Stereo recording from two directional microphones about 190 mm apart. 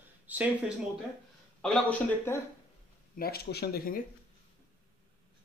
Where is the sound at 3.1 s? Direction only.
55° left (ahead or behind).